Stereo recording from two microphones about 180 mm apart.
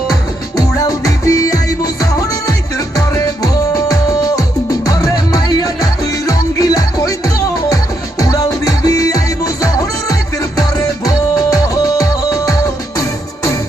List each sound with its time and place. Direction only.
0.8 s music: 20° left (ahead or behind)
3.4 s music: 20° left (ahead or behind)
8.2 s music: 20° left (ahead or behind)
10.8 s music: 20° left (ahead or behind)